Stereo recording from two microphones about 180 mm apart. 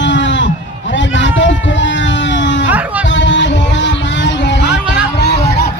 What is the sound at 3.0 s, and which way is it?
Music, 90° left.